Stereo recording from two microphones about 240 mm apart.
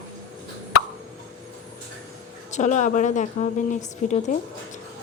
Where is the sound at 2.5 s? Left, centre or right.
Left.